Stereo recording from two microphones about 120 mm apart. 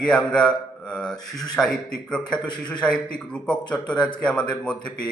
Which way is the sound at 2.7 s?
10° left (ahead or behind).